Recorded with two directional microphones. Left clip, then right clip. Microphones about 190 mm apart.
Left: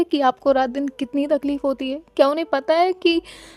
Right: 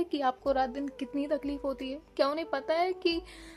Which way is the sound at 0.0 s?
55° left (ahead or behind).